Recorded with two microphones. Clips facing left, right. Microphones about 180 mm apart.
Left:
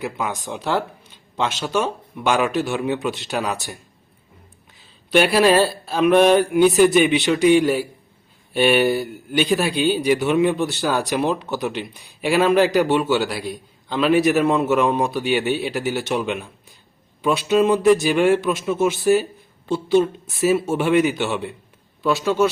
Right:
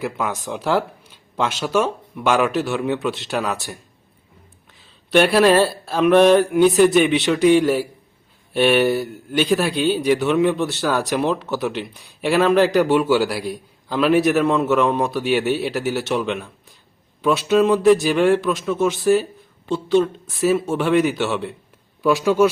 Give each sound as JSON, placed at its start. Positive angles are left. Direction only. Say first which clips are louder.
{"t": 0.0, "sound": "a man's voice", "louder": "right 2 dB", "side_deg": 0}
{"t": 4.8, "sound": "a man's voice", "louder": "right 1 dB", "side_deg": 0}